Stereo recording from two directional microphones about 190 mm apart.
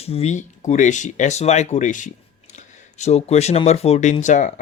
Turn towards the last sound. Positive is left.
turn(degrees=40)  # may be behind; listen again after turning